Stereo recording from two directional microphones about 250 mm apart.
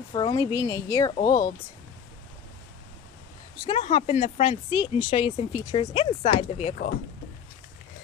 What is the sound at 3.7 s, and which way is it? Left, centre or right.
Speech, left.